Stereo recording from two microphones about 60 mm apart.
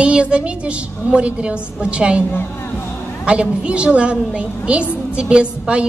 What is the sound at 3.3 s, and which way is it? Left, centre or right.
A woman's voice, centre.